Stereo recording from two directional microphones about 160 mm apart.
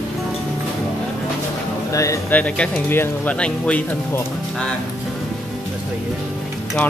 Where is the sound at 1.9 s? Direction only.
20° left (ahead or behind).